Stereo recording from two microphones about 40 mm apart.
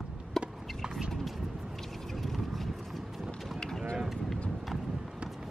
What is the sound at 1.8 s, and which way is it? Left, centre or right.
Mechanisms, centre.